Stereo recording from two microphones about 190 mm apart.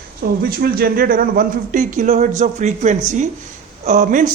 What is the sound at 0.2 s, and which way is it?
A man's voice, 55° right (ahead or behind).